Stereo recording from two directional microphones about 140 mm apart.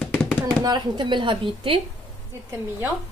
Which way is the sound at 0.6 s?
30° right (ahead or behind).